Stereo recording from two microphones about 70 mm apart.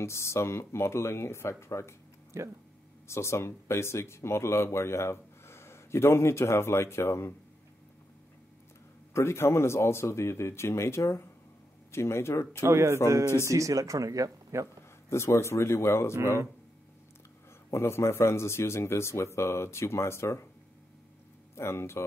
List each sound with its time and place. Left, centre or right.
0.0 s speech: left
2.3 s speech: right
3.1 s speech: left
9.1 s speech: left
12.6 s speech: right
15.0 s speech: left
17.6 s speech: left
21.5 s speech: left